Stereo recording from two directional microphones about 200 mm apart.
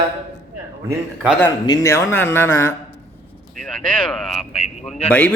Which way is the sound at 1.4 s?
15° left (ahead or behind).